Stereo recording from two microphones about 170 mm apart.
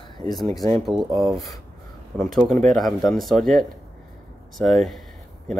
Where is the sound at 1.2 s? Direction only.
Centre (ahead or behind).